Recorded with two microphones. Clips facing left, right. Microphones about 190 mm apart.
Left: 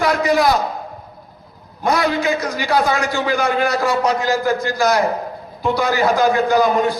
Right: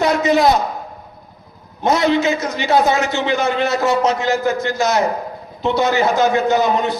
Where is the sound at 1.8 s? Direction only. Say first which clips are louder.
Right 3 dB; 20° right (ahead or behind).